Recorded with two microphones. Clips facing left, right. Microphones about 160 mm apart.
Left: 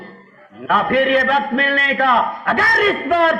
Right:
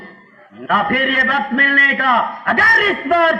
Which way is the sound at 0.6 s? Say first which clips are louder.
Left 2 dB; 55° right (ahead or behind).